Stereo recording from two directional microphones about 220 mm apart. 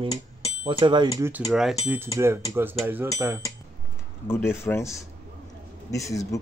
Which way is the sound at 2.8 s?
10° right (ahead or behind).